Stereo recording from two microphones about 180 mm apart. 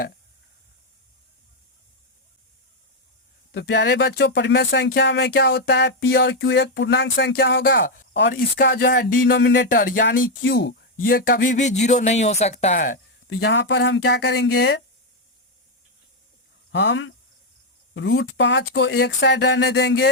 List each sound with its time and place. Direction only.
3.5 s speech: 75° left (ahead or behind); by 8.0 s 55° left (ahead or behind)
8.1 s speech: 80° left
8.4 s speech: 55° left (ahead or behind); by 9.6 s 80° left
9.6 s speech: 50° left (ahead or behind)
10.4 s speech: 80° left
10.9 s speech: 55° left (ahead or behind); by 12.8 s 40° left (ahead or behind)
13.2 s speech: 85° left
16.7 s speech: 85° left